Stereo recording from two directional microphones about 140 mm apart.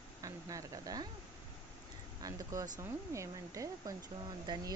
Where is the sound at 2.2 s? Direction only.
25° right (ahead or behind).